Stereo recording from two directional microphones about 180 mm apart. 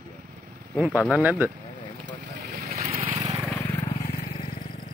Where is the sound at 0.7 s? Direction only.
5° right (ahead or behind).